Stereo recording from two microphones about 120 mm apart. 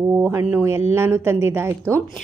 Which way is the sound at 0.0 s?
20° right (ahead or behind).